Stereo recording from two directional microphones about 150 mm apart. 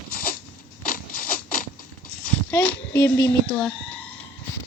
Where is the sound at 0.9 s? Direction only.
65° left (ahead or behind).